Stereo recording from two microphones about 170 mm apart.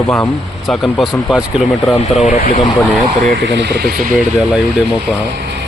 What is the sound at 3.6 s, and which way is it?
Speech, 75° right (ahead or behind).